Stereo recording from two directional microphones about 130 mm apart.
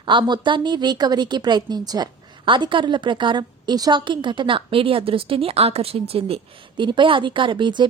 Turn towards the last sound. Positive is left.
turn(degrees=-35)  # may be behind; listen again after turning